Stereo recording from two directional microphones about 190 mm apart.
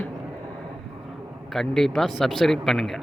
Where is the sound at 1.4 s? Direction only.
Centre (ahead or behind).